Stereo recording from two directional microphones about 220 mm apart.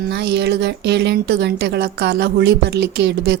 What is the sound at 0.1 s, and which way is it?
Speech, 50° right (ahead or behind).